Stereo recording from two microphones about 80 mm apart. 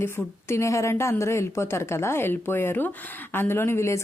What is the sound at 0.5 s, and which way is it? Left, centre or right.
Speech, left.